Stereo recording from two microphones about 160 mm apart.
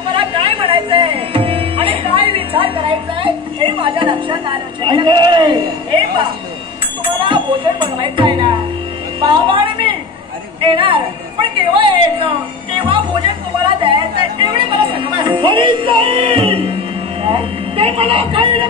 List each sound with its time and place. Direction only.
0.1 s music: 35° right (ahead or behind)
7.2 s bell: 30° right (ahead or behind)
9.2 s music: 30° right (ahead or behind)
10.6 s a woman's voice: 30° right (ahead or behind)
14.4 s music: 30° right (ahead or behind)
17.2 s a sound: 35° right (ahead or behind)